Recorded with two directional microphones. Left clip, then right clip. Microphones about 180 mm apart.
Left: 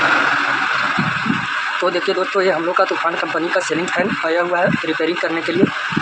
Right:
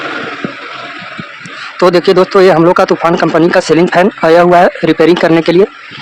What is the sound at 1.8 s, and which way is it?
Speech, 70° right (ahead or behind).